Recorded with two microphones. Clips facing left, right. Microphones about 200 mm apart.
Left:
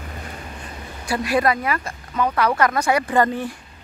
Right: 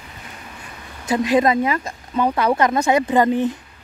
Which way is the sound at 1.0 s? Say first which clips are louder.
Right 3 dB; 20° right (ahead or behind).